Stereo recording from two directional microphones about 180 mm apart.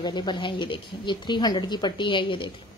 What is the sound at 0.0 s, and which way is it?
Speech, 25° left (ahead or behind).